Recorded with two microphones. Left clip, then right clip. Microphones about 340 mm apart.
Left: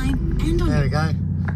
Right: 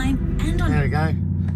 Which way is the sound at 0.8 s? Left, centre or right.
Centre.